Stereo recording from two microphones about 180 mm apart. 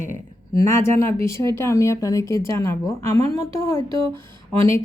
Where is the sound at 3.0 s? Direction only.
40° right (ahead or behind).